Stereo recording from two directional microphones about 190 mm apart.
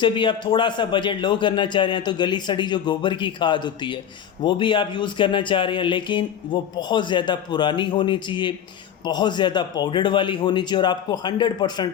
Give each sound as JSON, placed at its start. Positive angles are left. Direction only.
{"t": 0.0, "sound": "speech", "side_deg": 25}